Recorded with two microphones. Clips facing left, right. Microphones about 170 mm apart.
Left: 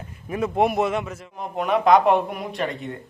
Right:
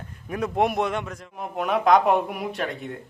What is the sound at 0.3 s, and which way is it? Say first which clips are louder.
A man's voice: left 2 dB; centre (ahead or behind).